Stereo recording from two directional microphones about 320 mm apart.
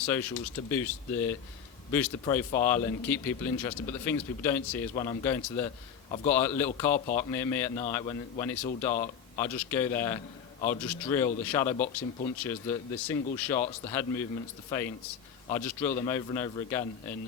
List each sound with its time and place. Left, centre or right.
0.0 s speech: centre
8.9 s speech: left
9.4 s speech: centre
15.4 s speech: centre